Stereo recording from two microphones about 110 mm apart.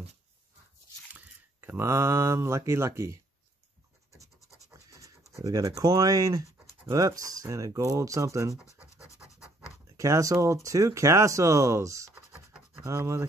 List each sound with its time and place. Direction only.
1.1 s speech: 20° right (ahead or behind)
4.6 s scratch: 30° right (ahead or behind)
5.3 s speech: 35° right (ahead or behind)
9.0 s scratch: 25° left (ahead or behind)
9.9 s speech: 30° right (ahead or behind)